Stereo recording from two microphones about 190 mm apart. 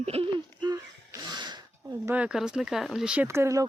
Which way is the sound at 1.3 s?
25° right (ahead or behind).